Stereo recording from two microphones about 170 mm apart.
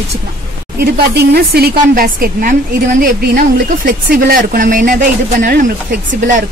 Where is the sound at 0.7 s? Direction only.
70° right (ahead or behind); by 5.7 s 50° right (ahead or behind).